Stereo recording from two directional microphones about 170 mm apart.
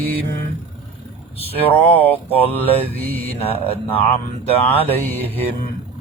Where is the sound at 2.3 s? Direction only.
10° left (ahead or behind).